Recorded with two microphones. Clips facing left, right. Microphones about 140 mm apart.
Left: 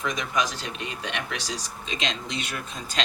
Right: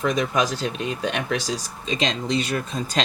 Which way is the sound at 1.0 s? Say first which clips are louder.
Right 7 dB; 40° right (ahead or behind).